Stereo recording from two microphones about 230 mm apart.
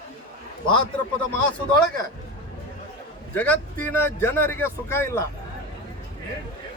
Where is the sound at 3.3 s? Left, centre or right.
Centre.